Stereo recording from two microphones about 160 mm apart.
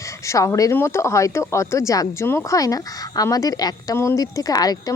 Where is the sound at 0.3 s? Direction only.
20° left (ahead or behind).